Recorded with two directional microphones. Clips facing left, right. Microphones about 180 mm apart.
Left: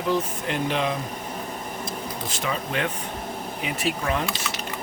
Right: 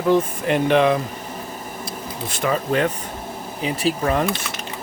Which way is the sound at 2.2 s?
55° right (ahead or behind).